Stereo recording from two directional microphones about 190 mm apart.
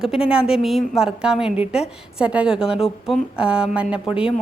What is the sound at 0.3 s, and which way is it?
A woman's voice, 5° right (ahead or behind).